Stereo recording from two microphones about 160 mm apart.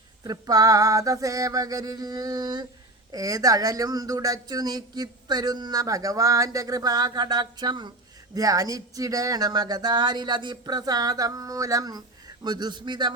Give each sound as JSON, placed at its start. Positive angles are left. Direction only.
{"t": 0.3, "sound": "speech", "side_deg": -25}